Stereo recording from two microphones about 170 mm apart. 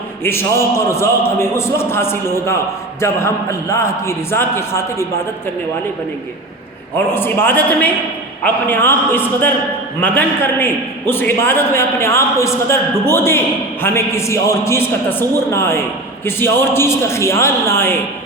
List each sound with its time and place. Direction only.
0.3 s a man's voice: 15° left (ahead or behind)
7.1 s a man's voice: 15° left (ahead or behind)